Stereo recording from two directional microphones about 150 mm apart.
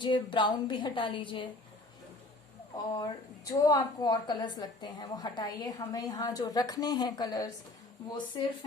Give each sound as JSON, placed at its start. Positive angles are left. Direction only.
{"t": 0.0, "sound": "a woman's voice", "side_deg": 30}
{"t": 2.7, "sound": "a woman's voice", "side_deg": 25}